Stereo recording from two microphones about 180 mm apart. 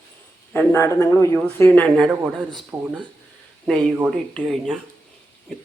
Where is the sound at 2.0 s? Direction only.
5° right (ahead or behind).